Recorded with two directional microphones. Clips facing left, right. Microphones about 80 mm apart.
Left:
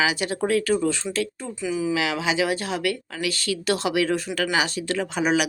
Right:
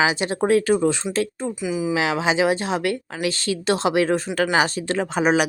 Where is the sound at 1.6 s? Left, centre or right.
Centre.